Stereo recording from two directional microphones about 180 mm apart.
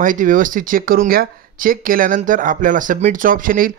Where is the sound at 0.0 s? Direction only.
45° right (ahead or behind).